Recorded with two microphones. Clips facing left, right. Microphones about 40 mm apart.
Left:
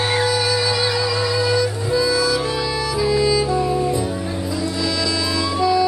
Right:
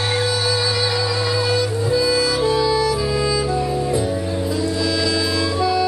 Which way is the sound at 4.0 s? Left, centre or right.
Centre.